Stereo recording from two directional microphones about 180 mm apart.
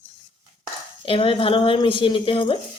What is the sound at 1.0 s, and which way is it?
A woman's voice, 30° left (ahead or behind).